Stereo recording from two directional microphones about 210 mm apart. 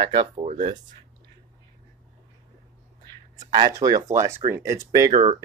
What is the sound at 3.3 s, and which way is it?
Speech, 20° right (ahead or behind).